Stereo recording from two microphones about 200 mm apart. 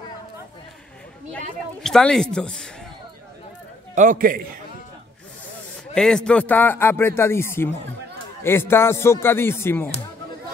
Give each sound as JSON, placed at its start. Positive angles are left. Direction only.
{"t": 1.3, "sound": "speech", "side_deg": 5}
{"t": 3.9, "sound": "a man's voice", "side_deg": -40}
{"t": 5.9, "sound": "speech", "side_deg": 5}